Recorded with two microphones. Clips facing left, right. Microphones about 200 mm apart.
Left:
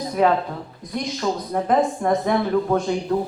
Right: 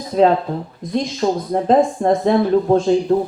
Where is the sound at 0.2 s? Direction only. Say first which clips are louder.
Right 5 dB; 25° right (ahead or behind).